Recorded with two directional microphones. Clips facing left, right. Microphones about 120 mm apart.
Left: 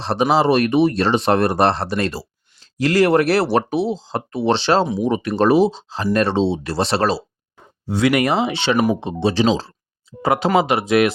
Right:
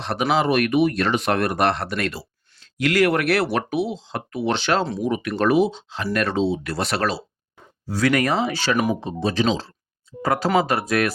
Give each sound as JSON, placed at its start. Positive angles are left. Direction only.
{"t": 0.0, "sound": "speech", "side_deg": 30}